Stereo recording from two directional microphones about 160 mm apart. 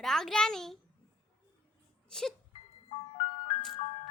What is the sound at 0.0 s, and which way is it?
Speech, centre (ahead or behind).